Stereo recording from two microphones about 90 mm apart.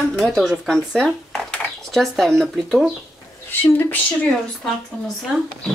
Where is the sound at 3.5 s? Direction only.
20° left (ahead or behind).